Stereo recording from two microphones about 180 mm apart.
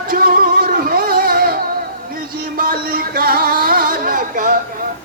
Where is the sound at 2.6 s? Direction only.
55° right (ahead or behind).